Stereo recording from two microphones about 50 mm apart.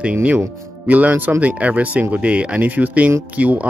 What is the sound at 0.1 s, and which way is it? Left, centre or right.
Speech, right.